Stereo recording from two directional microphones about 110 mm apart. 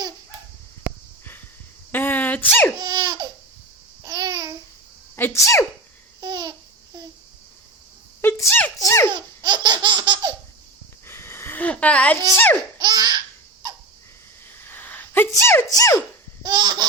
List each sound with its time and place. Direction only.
1.9 s sneeze: 15° left (ahead or behind)
2.7 s laughter: 40° right (ahead or behind)
4.0 s babbling: 35° right (ahead or behind)
5.1 s speech: 20° left (ahead or behind)
6.1 s babbling: 40° right (ahead or behind)
8.2 s a sound: 20° left (ahead or behind)
9.0 s laughter: 45° right (ahead or behind)
11.0 s sniff: 20° left (ahead or behind)
12.8 s laughter: 40° right (ahead or behind)
14.6 s a sound: 15° left (ahead or behind)
15.3 s speech: 20° left (ahead or behind)
15.7 s a sound: 30° left (ahead or behind)
16.4 s laughter: 40° right (ahead or behind)